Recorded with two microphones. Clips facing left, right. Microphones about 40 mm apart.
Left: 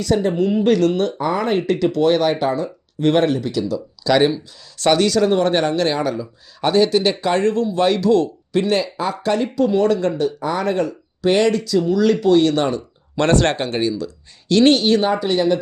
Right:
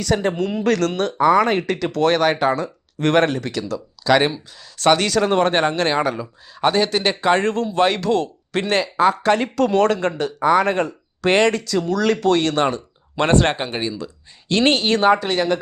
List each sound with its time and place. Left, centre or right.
0.1 s speech: right
0.6 s speech: right
3.0 s speech: right
4.0 s speech: right
4.8 s speech: right
9.6 s speech: right
13.4 s speech: centre
14.0 s speech: right